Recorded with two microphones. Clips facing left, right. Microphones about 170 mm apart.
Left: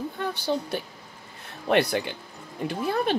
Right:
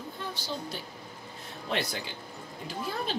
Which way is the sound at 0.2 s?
65° left (ahead or behind).